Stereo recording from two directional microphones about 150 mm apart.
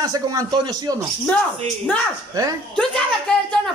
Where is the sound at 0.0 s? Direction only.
25° right (ahead or behind).